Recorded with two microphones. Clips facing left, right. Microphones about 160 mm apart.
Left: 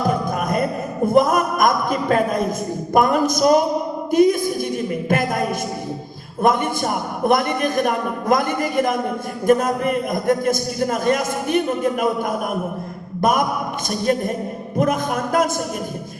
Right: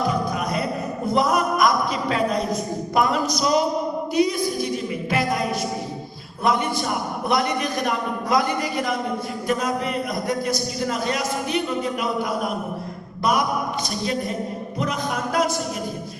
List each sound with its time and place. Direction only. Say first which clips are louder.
0.1 s a sound: left 3 dB; 50° left (ahead or behind)
4.1 s a man's voice: left 6 dB; 50° left (ahead or behind)
14.0 s a man's voice: left 7 dB; 50° left (ahead or behind)